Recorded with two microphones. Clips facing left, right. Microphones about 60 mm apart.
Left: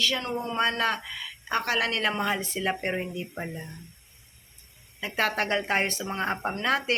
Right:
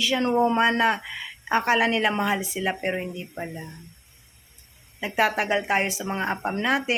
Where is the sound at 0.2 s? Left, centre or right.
Right.